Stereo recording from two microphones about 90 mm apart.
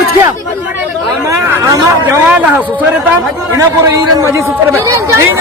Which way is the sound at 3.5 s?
35° right (ahead or behind).